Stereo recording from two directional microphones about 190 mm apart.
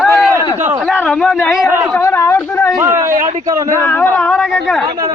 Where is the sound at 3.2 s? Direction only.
40° right (ahead or behind).